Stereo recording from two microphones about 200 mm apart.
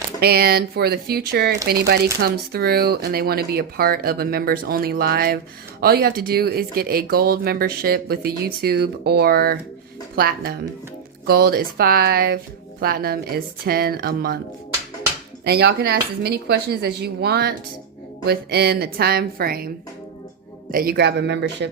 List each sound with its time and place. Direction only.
0.2 s speech: 50° right (ahead or behind)
15.4 s speech: 55° right (ahead or behind)